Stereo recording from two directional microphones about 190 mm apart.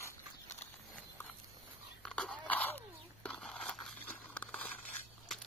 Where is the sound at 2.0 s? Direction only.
5° left (ahead or behind).